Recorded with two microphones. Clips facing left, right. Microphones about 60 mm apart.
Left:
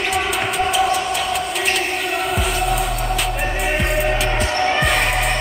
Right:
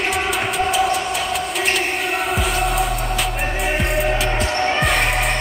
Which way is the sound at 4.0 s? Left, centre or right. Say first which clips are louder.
Even; centre.